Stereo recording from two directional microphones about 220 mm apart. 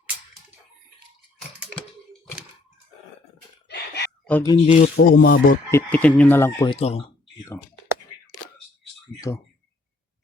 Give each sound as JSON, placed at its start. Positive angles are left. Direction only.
{"t": 3.7, "sound": "chicken", "side_deg": 50}
{"t": 4.3, "sound": "speech", "side_deg": 10}
{"t": 4.5, "sound": "speech", "side_deg": 30}
{"t": 4.9, "sound": "speech", "side_deg": 45}
{"t": 5.7, "sound": "speech", "side_deg": 5}
{"t": 6.7, "sound": "speech", "side_deg": 25}
{"t": 9.3, "sound": "speech", "side_deg": 10}